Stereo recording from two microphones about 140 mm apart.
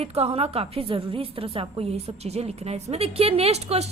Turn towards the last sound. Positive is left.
turn(degrees=-50)  # may be behind; listen again after turning